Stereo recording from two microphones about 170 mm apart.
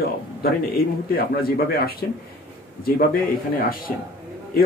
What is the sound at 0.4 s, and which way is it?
A man's voice, 65° left (ahead or behind).